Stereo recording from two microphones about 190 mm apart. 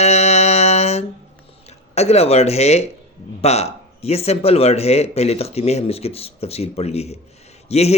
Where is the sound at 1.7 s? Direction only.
35° left (ahead or behind).